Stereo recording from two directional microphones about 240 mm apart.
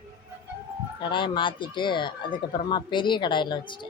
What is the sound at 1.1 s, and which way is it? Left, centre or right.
Speech, centre.